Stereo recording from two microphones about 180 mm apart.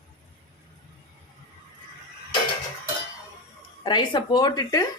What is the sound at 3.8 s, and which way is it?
Speech, 25° left (ahead or behind).